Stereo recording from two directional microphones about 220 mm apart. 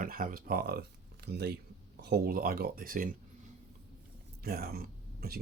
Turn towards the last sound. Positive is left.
turn(degrees=-45)  # may be behind; listen again after turning